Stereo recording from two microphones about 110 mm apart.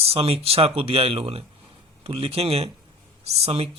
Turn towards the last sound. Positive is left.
turn(degrees=-70)  # may be behind; listen again after turning